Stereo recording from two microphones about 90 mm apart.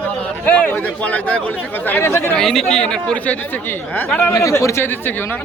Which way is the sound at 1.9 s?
25° left (ahead or behind).